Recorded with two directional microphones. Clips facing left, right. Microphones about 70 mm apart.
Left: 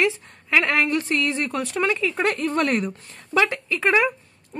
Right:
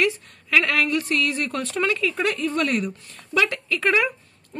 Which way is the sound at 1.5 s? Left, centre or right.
Centre.